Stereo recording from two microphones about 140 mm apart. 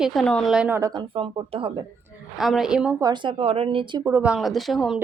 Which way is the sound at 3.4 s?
40° right (ahead or behind).